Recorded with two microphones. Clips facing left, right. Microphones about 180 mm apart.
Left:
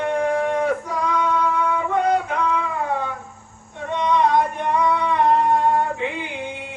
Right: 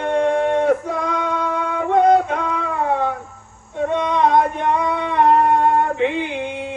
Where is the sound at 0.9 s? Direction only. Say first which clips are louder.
Even; 50° right (ahead or behind).